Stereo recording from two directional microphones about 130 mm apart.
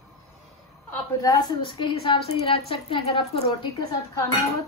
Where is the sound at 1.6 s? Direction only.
40° left (ahead or behind).